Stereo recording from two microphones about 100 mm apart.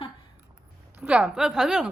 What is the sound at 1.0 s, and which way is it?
Speech, 10° right (ahead or behind).